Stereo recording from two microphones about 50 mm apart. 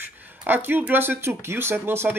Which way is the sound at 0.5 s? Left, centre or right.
Right.